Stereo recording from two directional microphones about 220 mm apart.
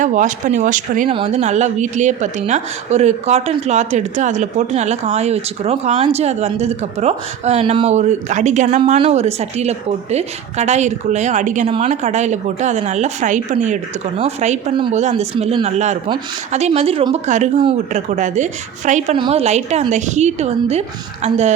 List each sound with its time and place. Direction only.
0.0 s a woman's voice: 35° right (ahead or behind)